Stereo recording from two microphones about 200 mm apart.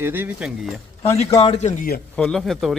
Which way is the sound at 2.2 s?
5° left (ahead or behind).